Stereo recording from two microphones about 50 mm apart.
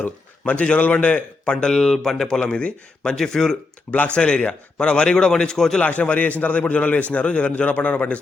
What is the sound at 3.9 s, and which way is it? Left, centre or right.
A man's voice, left.